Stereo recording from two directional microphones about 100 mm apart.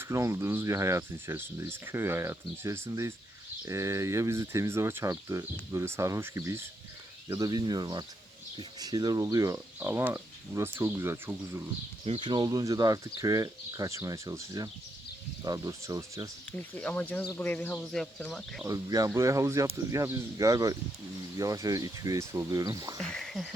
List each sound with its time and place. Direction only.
0.0 s speech: 30° right (ahead or behind)
12.2 s speech: 50° right (ahead or behind)
16.5 s speech: 15° left (ahead or behind)
17.7 s speech: 5° left (ahead or behind)
18.6 s speech: 35° right (ahead or behind)
23.0 s speech: 5° left (ahead or behind)